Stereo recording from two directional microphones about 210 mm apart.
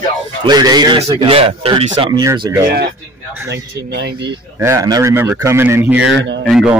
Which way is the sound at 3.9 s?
55° right (ahead or behind).